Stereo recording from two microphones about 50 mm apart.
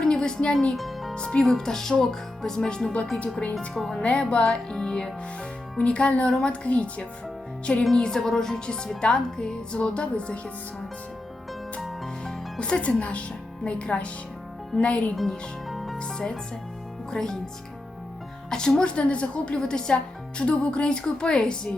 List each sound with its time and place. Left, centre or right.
0.0 s music: centre
0.8 s music: centre
1.1 s speech: centre
3.8 s speech: centre
4.0 s a woman's voice: left
4.4 s a woman's voice: centre
7.9 s a woman's voice: centre
12.5 s a woman's voice: left
15.1 s speech: centre
16.0 s speech: centre
18.5 s a woman's voice: centre